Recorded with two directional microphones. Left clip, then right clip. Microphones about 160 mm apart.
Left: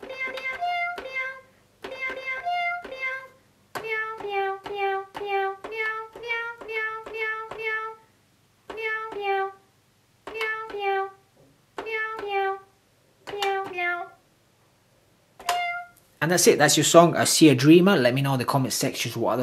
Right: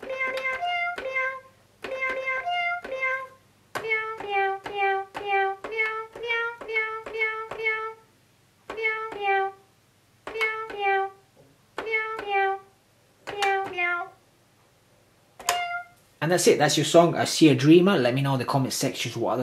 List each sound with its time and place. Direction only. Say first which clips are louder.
0.0 s music: right 3 dB; 10° left (ahead or behind)
3.8 s child singing: right 1 dB; 10° left (ahead or behind)
8.7 s a sound: right 1 dB; 10° left (ahead or behind)
10.2 s music: right 2 dB; centre (ahead or behind)
11.8 s hands: right 1 dB; 10° left (ahead or behind)
13.2 s music: right 2 dB; centre (ahead or behind)
16.2 s speech: left 1 dB; 35° left (ahead or behind)